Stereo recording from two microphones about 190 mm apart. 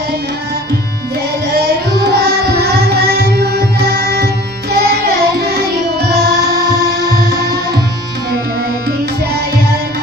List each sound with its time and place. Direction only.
1.5 s music: 60° right (ahead or behind)